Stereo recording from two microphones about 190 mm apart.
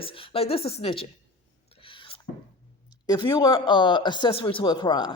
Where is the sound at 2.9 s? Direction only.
25° left (ahead or behind).